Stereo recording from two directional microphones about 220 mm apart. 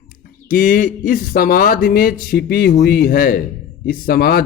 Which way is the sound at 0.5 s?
35° left (ahead or behind).